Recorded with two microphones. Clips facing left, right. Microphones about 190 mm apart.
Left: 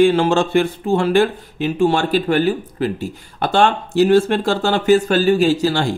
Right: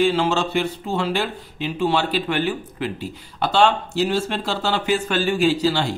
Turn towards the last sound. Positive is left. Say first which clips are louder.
# left 3 dB
turn(degrees=45)  # may be behind; listen again after turning